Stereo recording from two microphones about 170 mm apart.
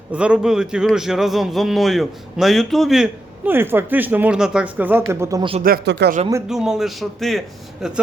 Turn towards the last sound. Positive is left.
turn(degrees=0)  # may be behind; listen again after turning